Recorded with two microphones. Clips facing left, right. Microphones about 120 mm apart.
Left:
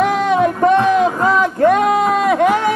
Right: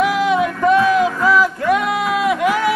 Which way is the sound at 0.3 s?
40° left (ahead or behind).